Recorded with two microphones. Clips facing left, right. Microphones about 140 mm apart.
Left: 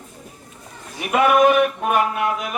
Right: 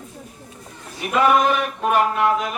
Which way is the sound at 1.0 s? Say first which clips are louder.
Left 2 dB; 55° left (ahead or behind).